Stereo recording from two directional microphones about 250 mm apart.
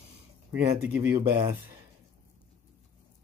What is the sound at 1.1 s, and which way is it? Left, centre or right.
Speech, centre.